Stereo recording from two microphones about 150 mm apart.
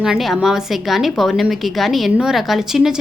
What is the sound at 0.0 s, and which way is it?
A woman's voice, centre (ahead or behind).